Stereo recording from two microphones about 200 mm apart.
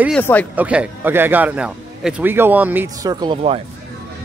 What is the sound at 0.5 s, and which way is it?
Speech, 5° right (ahead or behind).